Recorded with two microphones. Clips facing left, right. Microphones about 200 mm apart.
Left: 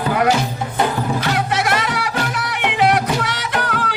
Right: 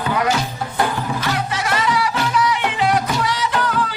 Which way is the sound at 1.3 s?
65° left (ahead or behind).